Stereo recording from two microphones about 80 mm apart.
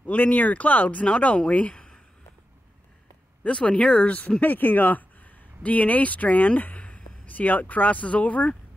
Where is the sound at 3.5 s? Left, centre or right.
Centre.